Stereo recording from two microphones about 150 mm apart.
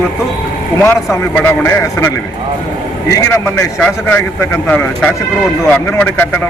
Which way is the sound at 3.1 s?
20° left (ahead or behind).